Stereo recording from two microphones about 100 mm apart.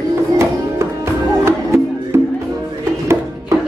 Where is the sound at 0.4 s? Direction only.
25° right (ahead or behind).